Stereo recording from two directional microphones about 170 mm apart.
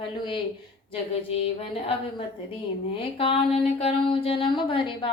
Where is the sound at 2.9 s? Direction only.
30° left (ahead or behind).